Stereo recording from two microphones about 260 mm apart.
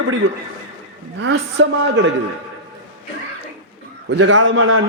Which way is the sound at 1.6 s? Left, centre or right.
Right.